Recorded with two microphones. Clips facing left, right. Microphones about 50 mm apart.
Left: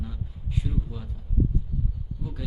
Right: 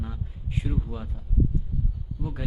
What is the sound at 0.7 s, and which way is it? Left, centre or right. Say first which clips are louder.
Speech: right 4 dB; centre.